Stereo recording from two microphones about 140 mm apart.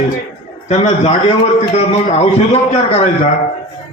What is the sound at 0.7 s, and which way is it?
A man's voice, 55° left (ahead or behind).